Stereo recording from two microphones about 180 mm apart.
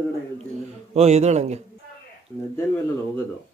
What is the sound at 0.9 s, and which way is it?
Speech, 35° right (ahead or behind).